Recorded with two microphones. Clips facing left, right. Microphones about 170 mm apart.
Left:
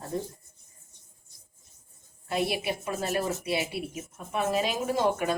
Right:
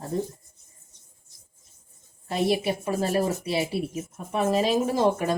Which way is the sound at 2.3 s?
30° right (ahead or behind).